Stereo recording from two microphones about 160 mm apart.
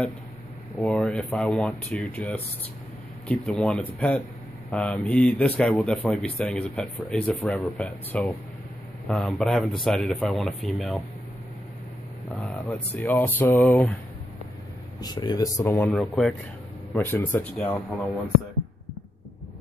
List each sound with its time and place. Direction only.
0.7 s speech: 5° left (ahead or behind)
12.4 s speech: 5° left (ahead or behind)
15.0 s speech: 25° left (ahead or behind)
15.9 s speech: centre (ahead or behind)
16.9 s speech: 15° left (ahead or behind)